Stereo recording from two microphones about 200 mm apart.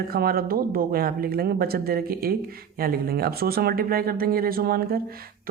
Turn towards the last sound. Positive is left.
turn(degrees=-50)  # may be behind; listen again after turning